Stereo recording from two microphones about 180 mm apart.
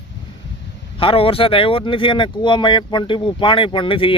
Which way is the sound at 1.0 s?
30° left (ahead or behind).